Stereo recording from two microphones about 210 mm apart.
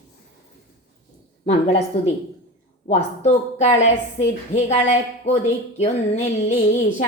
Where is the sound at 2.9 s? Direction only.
35° left (ahead or behind).